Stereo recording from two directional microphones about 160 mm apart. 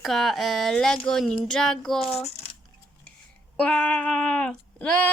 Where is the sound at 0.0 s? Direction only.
Centre (ahead or behind).